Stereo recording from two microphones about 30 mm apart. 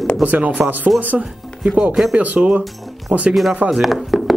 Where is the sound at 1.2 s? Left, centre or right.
Right.